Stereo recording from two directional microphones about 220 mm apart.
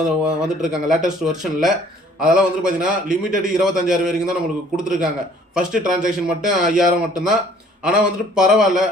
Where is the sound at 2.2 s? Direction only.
5° right (ahead or behind).